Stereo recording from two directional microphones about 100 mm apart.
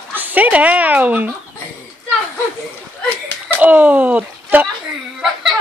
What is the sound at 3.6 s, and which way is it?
Speech, 15° right (ahead or behind).